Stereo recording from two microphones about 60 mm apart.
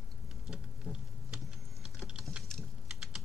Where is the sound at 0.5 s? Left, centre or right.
Centre.